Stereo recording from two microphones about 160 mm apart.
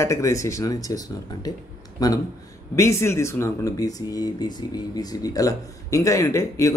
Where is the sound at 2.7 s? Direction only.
15° left (ahead or behind).